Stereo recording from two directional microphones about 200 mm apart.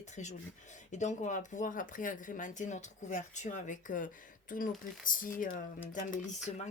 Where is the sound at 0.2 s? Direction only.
35° left (ahead or behind).